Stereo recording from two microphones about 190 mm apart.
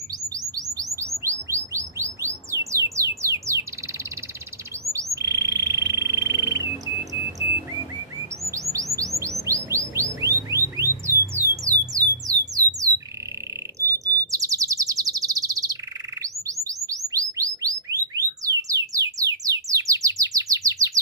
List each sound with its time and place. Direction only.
0.4 s chirp: 20° right (ahead or behind)
0.9 s bird: 15° right (ahead or behind)
4.8 s bird: 15° right (ahead or behind)
8.5 s chirp: 15° right (ahead or behind)
11.6 s music: 20° right (ahead or behind)
12.5 s squawk: 20° right (ahead or behind)
13.7 s chirp: 15° right (ahead or behind)
16.6 s bird: 20° right (ahead or behind)